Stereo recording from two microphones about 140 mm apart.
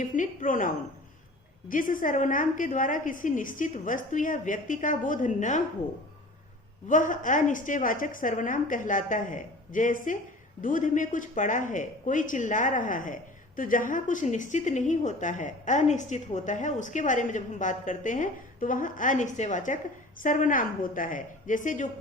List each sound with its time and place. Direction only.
0.0 s a woman's voice: 70° left (ahead or behind)
6.8 s a woman's voice: 70° left (ahead or behind)